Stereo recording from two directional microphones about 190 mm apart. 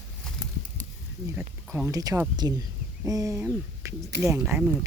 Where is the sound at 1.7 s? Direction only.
15° right (ahead or behind).